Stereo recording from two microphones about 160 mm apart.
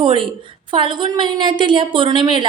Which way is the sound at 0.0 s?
30° right (ahead or behind).